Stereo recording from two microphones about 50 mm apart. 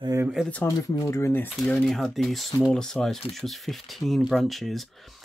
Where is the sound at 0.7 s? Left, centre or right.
Left.